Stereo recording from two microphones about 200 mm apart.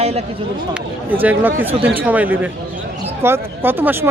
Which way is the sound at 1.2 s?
10° right (ahead or behind).